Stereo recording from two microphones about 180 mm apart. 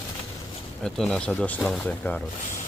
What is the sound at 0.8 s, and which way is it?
Speech, 5° left (ahead or behind).